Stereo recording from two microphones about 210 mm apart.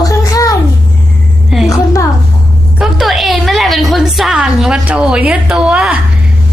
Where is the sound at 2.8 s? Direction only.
Centre (ahead or behind).